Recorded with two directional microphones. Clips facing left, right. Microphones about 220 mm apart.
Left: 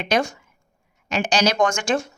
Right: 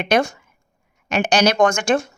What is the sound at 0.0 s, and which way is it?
Speech, 60° right (ahead or behind).